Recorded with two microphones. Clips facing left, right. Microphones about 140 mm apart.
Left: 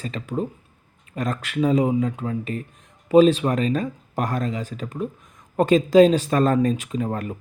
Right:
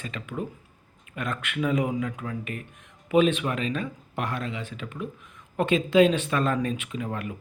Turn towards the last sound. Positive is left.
turn(degrees=40)  # may be behind; listen again after turning